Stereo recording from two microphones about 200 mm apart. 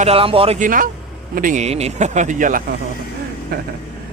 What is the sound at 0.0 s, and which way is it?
Speech, 30° right (ahead or behind).